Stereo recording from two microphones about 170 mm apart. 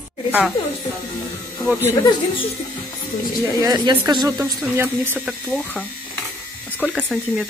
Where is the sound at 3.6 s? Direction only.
25° right (ahead or behind).